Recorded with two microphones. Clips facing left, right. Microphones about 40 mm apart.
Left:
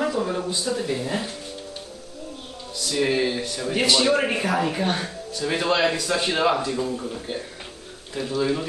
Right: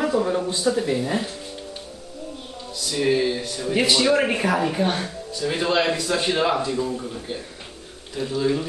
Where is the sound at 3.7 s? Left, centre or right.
Centre.